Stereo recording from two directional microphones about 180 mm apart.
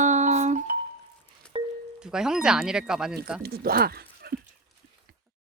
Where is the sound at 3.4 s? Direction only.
60° right (ahead or behind).